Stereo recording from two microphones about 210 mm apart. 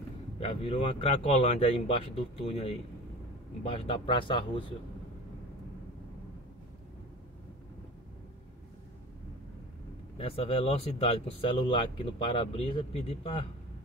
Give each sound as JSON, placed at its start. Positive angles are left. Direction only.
{"t": 0.4, "sound": "speech", "side_deg": 25}
{"t": 10.1, "sound": "speech", "side_deg": 25}